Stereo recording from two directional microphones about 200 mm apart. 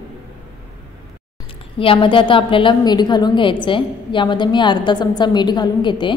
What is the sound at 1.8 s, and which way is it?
A woman's voice, 25° left (ahead or behind).